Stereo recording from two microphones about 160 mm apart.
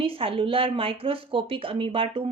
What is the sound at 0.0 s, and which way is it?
Speech, 35° right (ahead or behind).